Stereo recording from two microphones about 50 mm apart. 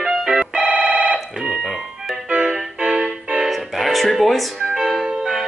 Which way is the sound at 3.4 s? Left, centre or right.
Centre.